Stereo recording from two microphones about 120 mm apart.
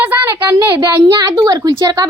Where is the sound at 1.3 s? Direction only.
30° right (ahead or behind).